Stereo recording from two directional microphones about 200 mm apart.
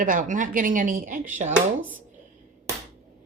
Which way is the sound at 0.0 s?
40° right (ahead or behind).